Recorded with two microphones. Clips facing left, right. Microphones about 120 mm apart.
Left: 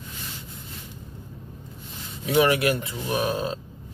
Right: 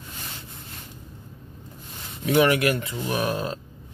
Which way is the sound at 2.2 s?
30° left (ahead or behind).